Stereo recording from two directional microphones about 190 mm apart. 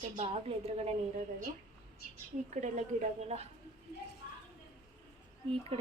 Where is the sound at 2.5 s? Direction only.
40° right (ahead or behind).